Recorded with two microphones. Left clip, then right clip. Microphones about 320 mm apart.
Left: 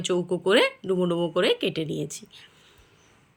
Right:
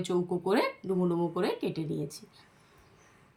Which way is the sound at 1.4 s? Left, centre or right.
Centre.